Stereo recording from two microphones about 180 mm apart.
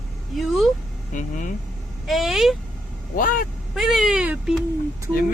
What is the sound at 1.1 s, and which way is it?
Speech, 45° left (ahead or behind).